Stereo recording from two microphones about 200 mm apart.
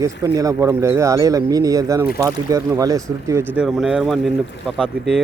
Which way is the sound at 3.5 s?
Centre (ahead or behind).